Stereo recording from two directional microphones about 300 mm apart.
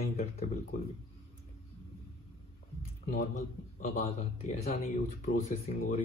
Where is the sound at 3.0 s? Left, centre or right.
Left.